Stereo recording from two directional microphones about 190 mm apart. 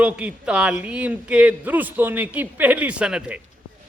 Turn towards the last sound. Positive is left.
turn(degrees=-5)  # may be behind; listen again after turning